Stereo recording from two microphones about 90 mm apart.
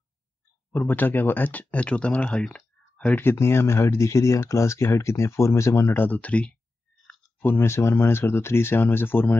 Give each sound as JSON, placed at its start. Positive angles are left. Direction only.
{"t": 0.8, "sound": "speech", "side_deg": 20}
{"t": 3.2, "sound": "speech", "side_deg": 25}
{"t": 7.4, "sound": "speech", "side_deg": 25}